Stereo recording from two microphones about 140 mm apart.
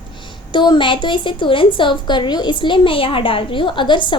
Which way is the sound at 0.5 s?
35° left (ahead or behind).